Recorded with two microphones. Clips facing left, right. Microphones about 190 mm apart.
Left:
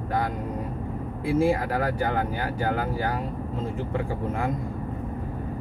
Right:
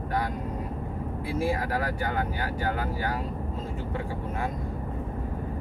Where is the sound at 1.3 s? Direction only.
30° left (ahead or behind).